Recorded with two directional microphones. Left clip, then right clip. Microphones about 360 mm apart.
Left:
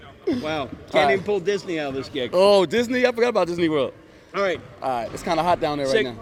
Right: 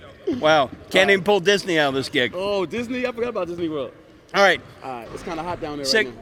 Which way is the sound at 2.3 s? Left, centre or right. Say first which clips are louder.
Left 8 dB; left.